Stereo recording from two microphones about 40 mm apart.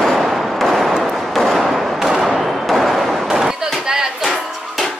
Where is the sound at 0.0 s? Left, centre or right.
Centre.